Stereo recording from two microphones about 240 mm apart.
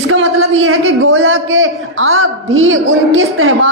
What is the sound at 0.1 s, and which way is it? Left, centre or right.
A man's voice, right.